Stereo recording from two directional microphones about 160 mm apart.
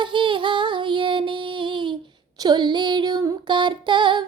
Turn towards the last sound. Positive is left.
turn(degrees=-30)  # may be behind; listen again after turning